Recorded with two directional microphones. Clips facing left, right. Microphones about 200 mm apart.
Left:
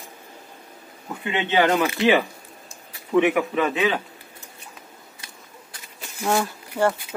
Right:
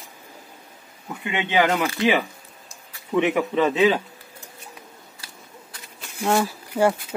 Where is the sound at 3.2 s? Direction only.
25° right (ahead or behind).